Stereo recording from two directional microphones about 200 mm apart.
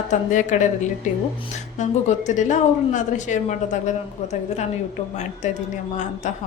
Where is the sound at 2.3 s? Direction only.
35° left (ahead or behind).